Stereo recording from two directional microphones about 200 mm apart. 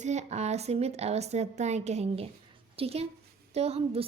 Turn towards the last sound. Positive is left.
turn(degrees=-30)  # may be behind; listen again after turning